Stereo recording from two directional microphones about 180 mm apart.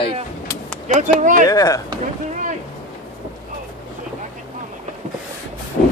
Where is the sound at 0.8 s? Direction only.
40° right (ahead or behind).